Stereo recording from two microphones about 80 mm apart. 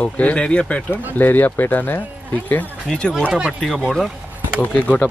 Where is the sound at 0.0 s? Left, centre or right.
Centre.